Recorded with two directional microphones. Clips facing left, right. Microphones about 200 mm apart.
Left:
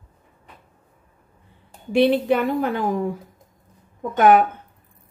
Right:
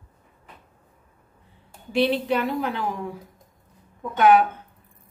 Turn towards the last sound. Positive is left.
turn(degrees=50)  # may be behind; listen again after turning